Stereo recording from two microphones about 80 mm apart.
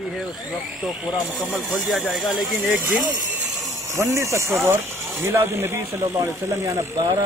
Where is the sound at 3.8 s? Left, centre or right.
Right.